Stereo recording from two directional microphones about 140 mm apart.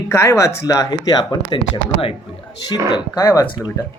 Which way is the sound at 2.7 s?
30° left (ahead or behind).